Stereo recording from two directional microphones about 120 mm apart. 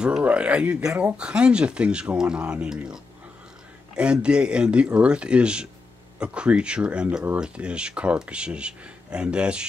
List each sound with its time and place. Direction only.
0.0 s speech: 10° right (ahead or behind)